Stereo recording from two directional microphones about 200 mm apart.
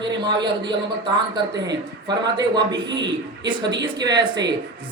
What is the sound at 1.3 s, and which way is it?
A man's voice, 20° right (ahead or behind).